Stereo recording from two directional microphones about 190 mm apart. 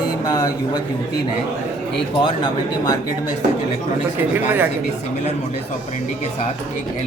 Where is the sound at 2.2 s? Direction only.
20° left (ahead or behind).